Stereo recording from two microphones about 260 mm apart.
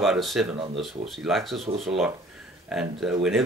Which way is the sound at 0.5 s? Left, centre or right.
Right.